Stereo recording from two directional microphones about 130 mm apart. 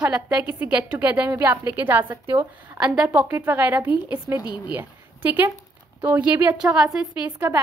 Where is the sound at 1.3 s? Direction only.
20° right (ahead or behind).